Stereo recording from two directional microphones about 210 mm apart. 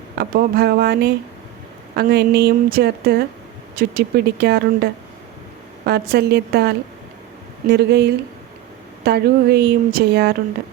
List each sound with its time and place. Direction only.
0.2 s speech: 50° right (ahead or behind)